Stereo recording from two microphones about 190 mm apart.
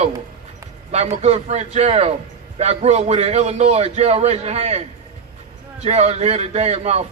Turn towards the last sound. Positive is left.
turn(degrees=-35)  # may be behind; listen again after turning